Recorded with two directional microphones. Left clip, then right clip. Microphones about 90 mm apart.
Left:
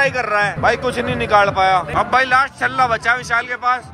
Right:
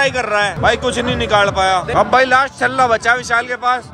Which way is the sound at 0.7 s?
25° right (ahead or behind).